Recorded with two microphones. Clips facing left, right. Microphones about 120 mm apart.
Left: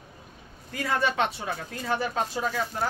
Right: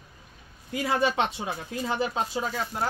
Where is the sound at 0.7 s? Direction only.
15° right (ahead or behind).